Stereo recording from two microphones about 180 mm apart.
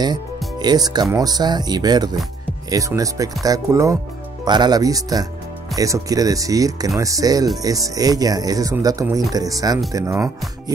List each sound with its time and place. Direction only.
0.6 s speech: 20° right (ahead or behind)